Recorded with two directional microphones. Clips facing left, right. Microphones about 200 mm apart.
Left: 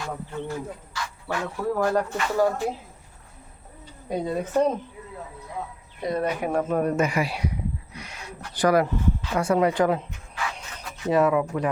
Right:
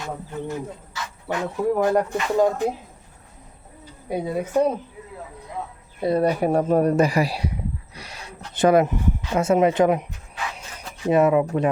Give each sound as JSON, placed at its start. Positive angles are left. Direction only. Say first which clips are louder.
{"t": 0.0, "sound": "speech", "louder": "right 1 dB", "side_deg": -20}
{"t": 4.1, "sound": "speech", "louder": "right 2 dB", "side_deg": -10}
{"t": 6.0, "sound": "speech", "louder": "right 6 dB", "side_deg": -30}
{"t": 7.9, "sound": "a sound", "louder": "even", "side_deg": -35}
{"t": 8.5, "sound": "speech", "louder": "right 4 dB", "side_deg": -25}